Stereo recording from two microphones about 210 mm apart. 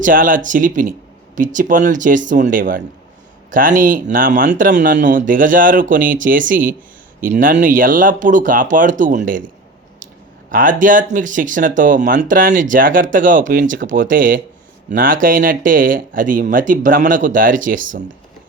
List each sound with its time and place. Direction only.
0.0 s speech: 40° right (ahead or behind)
10.5 s speech: 40° right (ahead or behind)